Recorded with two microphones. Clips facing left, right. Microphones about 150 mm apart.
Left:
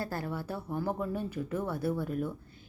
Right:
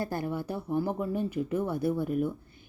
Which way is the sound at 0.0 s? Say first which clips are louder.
Right 4 dB; 20° right (ahead or behind).